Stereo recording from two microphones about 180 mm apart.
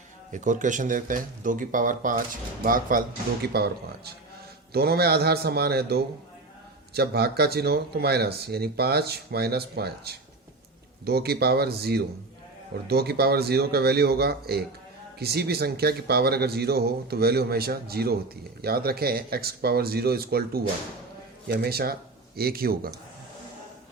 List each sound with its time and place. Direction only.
0.3 s speech: 45° right (ahead or behind)
3.4 s speech: 60° right (ahead or behind)